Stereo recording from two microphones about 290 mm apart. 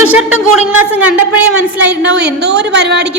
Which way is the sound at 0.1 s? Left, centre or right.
Centre.